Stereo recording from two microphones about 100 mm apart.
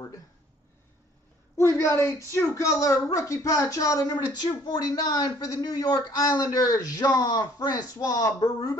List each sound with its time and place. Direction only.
1.6 s a woman's voice: 30° left (ahead or behind)